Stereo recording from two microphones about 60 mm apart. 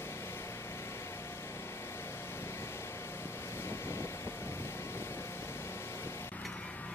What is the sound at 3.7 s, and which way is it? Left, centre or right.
Vehicle, left.